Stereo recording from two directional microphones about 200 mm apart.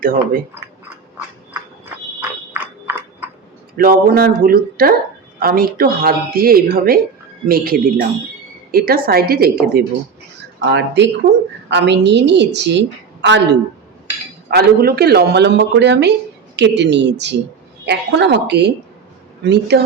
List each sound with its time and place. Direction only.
0.0 s speech: 45° right (ahead or behind)
2.5 s a sound: 10° right (ahead or behind)
3.8 s speech: 50° right (ahead or behind)
10.6 s a man's voice: 60° right (ahead or behind)
14.5 s a man's voice: 50° right (ahead or behind)